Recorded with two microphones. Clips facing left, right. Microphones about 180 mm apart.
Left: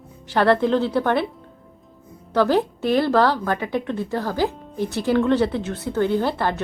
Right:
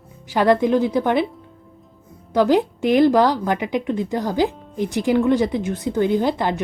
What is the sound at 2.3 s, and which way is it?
A woman's voice, 15° right (ahead or behind).